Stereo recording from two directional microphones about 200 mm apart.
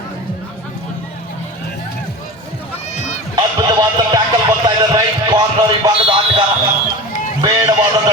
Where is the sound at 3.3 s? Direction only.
20° right (ahead or behind).